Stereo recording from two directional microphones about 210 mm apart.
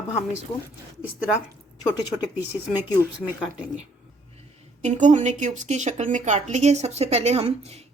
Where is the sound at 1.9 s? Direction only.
10° right (ahead or behind).